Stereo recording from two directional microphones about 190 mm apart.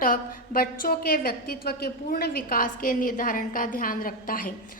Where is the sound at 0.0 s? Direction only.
50° left (ahead or behind).